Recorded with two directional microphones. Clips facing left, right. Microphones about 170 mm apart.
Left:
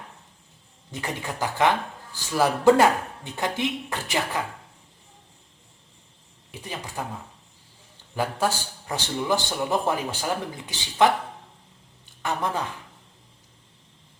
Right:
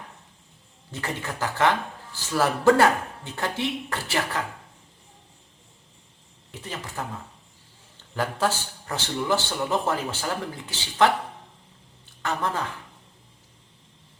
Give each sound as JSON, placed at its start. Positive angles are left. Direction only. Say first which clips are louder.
{"t": 0.9, "sound": "a man's voice", "louder": "even", "side_deg": 15}
{"t": 6.5, "sound": "speech", "louder": "even", "side_deg": 15}
{"t": 8.1, "sound": "a man's voice", "louder": "even", "side_deg": 15}
{"t": 12.2, "sound": "a man's voice", "louder": "even", "side_deg": 15}